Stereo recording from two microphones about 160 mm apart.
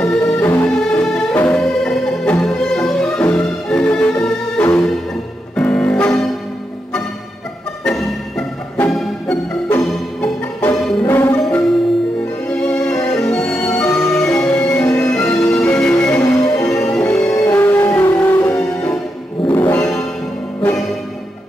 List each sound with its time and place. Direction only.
0.0 s music: 5° left (ahead or behind)
7.8 s music: 5° left (ahead or behind)
13.7 s music: 20° left (ahead or behind)
14.1 s music: 10° left (ahead or behind)